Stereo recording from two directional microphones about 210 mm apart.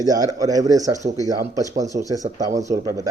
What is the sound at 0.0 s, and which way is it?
Speech, 15° right (ahead or behind).